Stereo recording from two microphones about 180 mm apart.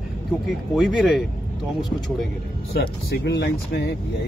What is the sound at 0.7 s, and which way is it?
Speech, centre (ahead or behind).